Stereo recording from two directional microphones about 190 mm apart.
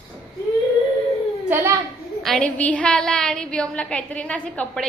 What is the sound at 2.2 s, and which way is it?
A woman's voice, 5° left (ahead or behind).